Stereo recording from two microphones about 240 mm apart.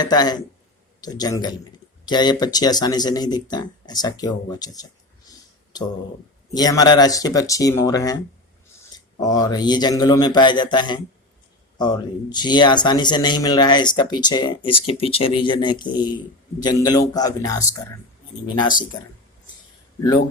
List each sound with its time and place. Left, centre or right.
0.0 s speech: centre
6.5 s speech: centre
9.2 s speech: centre